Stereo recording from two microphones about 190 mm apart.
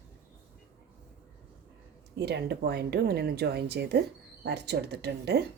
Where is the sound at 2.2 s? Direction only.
60° right (ahead or behind).